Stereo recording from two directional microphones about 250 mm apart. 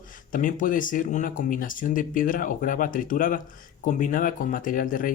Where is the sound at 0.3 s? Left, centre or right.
Left.